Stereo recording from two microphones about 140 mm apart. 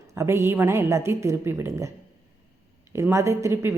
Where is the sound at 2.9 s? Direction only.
20° right (ahead or behind).